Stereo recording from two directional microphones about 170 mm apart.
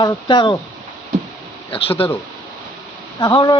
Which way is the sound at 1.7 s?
30° left (ahead or behind).